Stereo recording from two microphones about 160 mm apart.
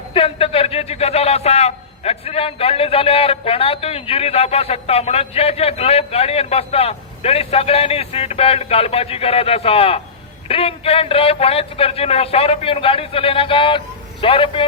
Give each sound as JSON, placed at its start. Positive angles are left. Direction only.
{"t": 0.1, "sound": "a man's voice", "side_deg": 35}